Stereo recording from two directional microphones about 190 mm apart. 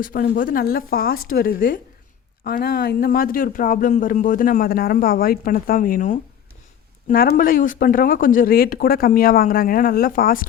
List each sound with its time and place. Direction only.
0.0 s speech: 50° left (ahead or behind)